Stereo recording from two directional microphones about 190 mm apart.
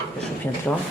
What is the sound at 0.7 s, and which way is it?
Speech, 10° left (ahead or behind).